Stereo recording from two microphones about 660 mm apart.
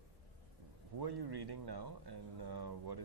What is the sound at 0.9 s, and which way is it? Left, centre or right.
Speech, right.